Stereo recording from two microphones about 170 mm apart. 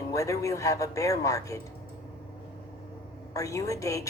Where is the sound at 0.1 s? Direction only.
20° left (ahead or behind).